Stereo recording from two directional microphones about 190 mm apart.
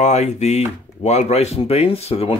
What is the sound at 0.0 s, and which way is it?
Speech, 35° left (ahead or behind).